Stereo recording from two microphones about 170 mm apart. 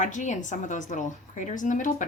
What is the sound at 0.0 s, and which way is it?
A woman's voice, 45° left (ahead or behind).